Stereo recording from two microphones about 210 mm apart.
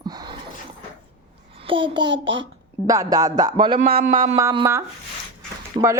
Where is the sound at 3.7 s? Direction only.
40° right (ahead or behind).